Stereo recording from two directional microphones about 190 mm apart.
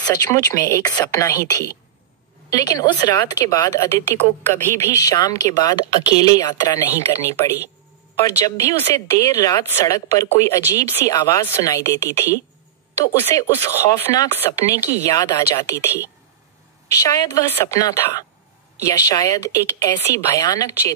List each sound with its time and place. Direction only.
0.0 s a woman's voice: 20° left (ahead or behind)
16.9 s speech: 15° left (ahead or behind)